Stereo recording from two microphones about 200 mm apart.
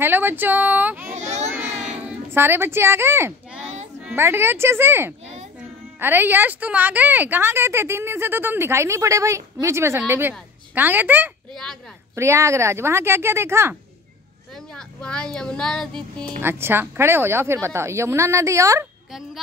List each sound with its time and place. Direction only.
0.0 s a woman's voice: 10° right (ahead or behind)
1.1 s a child's voice: 35° right (ahead or behind)
1.9 s a child's voice: 10° right (ahead or behind)
3.6 s child singing: 30° right (ahead or behind)
4.0 s a woman's voice: 10° right (ahead or behind)
14.5 s speech: 5° left (ahead or behind)
16.4 s a woman's voice: 10° right (ahead or behind)